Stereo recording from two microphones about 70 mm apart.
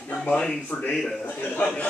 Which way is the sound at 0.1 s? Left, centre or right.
Centre.